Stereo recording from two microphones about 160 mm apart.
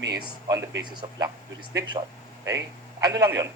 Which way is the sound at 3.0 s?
20° right (ahead or behind).